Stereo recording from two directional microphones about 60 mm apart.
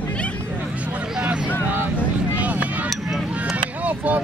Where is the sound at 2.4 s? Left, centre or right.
Right.